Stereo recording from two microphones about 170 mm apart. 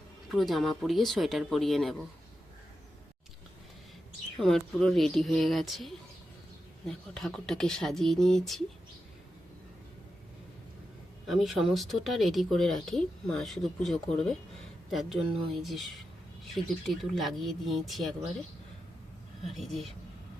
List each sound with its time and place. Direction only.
0.3 s speech: centre (ahead or behind)
4.4 s speech: centre (ahead or behind)
11.3 s speech: centre (ahead or behind)
19.5 s speech: centre (ahead or behind)